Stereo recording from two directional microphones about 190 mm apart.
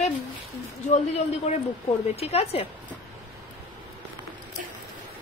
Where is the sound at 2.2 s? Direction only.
30° left (ahead or behind).